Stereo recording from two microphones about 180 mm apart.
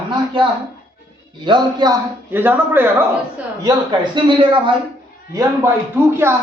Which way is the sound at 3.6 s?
25° right (ahead or behind).